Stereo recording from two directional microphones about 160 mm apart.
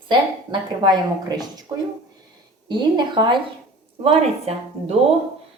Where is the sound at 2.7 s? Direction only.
25° right (ahead or behind).